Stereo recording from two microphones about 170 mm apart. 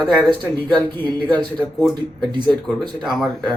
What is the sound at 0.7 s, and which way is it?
Speech, 10° left (ahead or behind).